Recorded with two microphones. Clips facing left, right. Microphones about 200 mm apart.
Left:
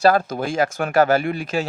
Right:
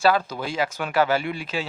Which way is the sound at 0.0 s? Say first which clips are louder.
Left 4 dB; 45° left (ahead or behind).